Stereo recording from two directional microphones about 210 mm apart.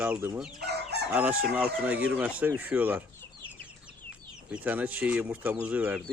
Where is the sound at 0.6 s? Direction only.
50° right (ahead or behind).